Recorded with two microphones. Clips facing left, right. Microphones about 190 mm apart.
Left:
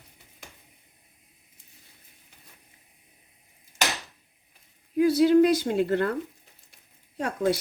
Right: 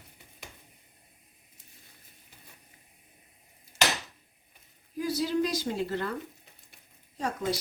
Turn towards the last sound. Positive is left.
turn(degrees=60)  # may be behind; listen again after turning